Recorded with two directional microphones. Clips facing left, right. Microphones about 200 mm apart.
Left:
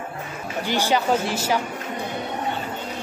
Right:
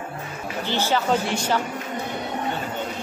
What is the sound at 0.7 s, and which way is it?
Speech, 15° left (ahead or behind).